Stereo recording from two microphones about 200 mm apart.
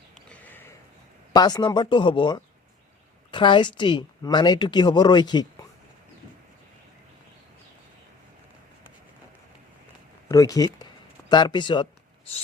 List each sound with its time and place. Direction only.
0.1 s sniff: 5° left (ahead or behind)
1.3 s a woman's voice: 20° left (ahead or behind)
10.2 s a woman's voice: 15° left (ahead or behind)